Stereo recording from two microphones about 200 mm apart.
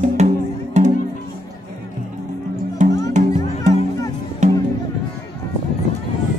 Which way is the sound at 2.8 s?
40° right (ahead or behind).